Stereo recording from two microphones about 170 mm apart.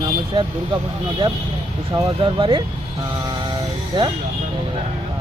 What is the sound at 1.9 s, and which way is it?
Speech, 30° right (ahead or behind).